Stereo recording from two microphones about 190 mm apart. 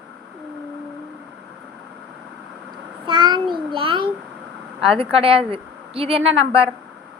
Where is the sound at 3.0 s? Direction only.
25° right (ahead or behind).